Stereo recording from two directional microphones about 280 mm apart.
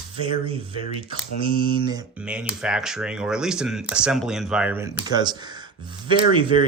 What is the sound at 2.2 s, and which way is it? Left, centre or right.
Speech, centre.